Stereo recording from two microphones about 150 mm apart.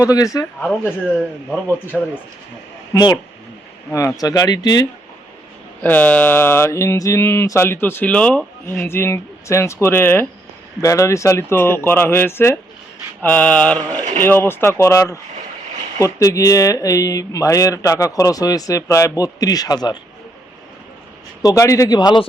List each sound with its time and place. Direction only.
0.0 s speech: 25° left (ahead or behind)
0.6 s mantra: 5° left (ahead or behind)
1.0 s a man's voice: centre (ahead or behind)
2.9 s speech: 30° left (ahead or behind)
5.8 s mantra: 10° left (ahead or behind)
16.0 s speech: 20° left (ahead or behind)
21.4 s speech: 20° left (ahead or behind)